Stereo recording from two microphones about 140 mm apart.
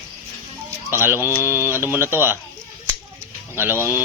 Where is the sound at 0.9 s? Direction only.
15° right (ahead or behind).